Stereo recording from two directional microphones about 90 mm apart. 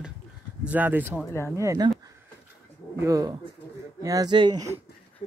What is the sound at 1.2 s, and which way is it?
Speech, 30° left (ahead or behind).